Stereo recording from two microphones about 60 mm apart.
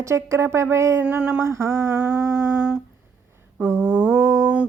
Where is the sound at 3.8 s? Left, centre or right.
Right.